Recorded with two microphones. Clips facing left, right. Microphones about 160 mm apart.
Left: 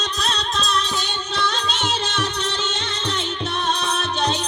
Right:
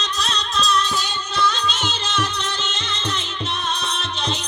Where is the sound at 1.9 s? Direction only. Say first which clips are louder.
Left 3 dB; 65° left (ahead or behind).